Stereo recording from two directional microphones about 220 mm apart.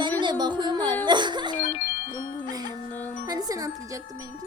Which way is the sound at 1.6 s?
35° left (ahead or behind).